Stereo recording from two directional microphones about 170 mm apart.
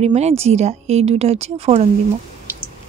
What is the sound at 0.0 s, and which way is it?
Speech, 40° right (ahead or behind).